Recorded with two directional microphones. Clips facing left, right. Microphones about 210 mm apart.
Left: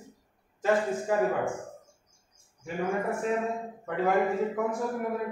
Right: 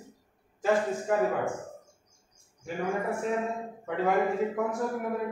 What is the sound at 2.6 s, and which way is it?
Speech, centre (ahead or behind).